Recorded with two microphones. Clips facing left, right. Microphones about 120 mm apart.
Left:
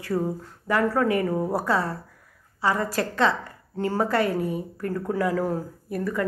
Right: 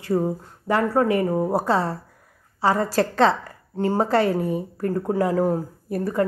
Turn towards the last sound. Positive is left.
turn(degrees=-35)  # may be behind; listen again after turning